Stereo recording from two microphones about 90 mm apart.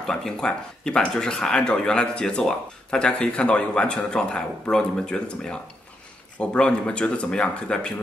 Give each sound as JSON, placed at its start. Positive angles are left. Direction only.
{"t": 0.0, "sound": "speech", "side_deg": 5}